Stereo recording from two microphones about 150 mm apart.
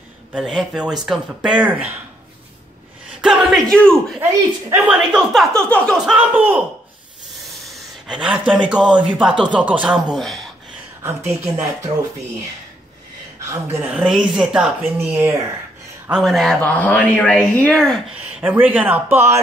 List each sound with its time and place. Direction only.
0.3 s speech: 5° right (ahead or behind)
3.2 s speech: 5° right (ahead or behind)
3.7 s speech: 5° left (ahead or behind)
4.2 s speech: 15° right (ahead or behind)
4.9 s speech: 5° right (ahead or behind)
5.9 s speech: 5° right (ahead or behind)
7.7 s a sound: 5° right (ahead or behind)
8.6 s speech: 5° right (ahead or behind)
10.1 s speech: centre (ahead or behind)
11.0 s speech: 15° right (ahead or behind)
13.5 s speech: 15° right (ahead or behind)
13.9 s speech: 5° right (ahead or behind)
16.1 s speech: centre (ahead or behind)
18.2 s speech: 10° right (ahead or behind)